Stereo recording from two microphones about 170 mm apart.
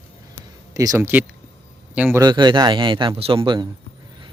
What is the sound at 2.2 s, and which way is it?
Speech, 25° right (ahead or behind).